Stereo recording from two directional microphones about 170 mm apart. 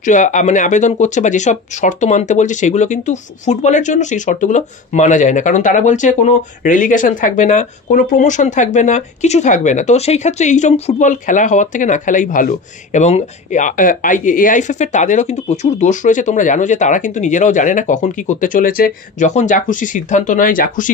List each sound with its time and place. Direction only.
0.0 s speech: 45° left (ahead or behind)